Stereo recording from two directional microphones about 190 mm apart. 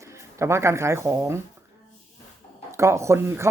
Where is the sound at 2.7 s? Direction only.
15° right (ahead or behind).